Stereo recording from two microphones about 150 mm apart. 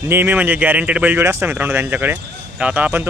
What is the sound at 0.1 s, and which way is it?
Speech, 15° right (ahead or behind).